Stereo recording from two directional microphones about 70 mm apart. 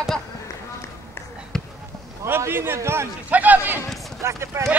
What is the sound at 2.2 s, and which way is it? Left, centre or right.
Speech, right.